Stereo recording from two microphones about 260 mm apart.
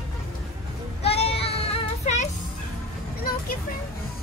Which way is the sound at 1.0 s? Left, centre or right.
Left.